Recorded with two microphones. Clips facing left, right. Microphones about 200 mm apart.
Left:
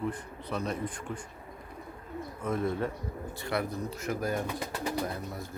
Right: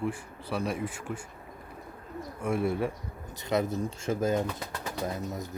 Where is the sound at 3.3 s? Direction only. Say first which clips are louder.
Right 5 dB; 20° right (ahead or behind).